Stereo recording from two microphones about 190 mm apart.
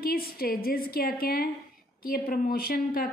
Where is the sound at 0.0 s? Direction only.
55° left (ahead or behind).